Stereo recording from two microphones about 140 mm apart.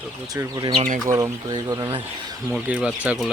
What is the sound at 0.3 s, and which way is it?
Speech, 25° right (ahead or behind).